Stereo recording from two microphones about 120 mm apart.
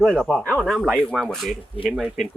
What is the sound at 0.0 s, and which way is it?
Speech, 5° left (ahead or behind).